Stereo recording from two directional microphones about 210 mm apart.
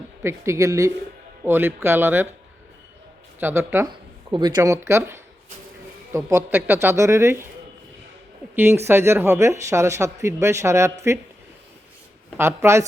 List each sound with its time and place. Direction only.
0.2 s speech: 15° right (ahead or behind)
3.4 s speech: 10° right (ahead or behind)
8.5 s speech: 10° right (ahead or behind)
12.4 s speech: 10° right (ahead or behind)